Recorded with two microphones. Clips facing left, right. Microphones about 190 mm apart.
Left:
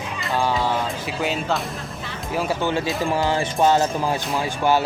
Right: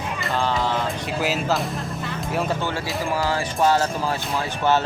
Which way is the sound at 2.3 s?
5° left (ahead or behind).